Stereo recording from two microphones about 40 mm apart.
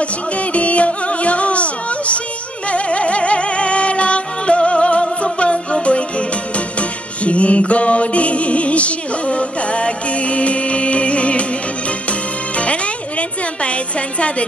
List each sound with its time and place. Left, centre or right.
0.0 s music: left
13.6 s a woman's voice: left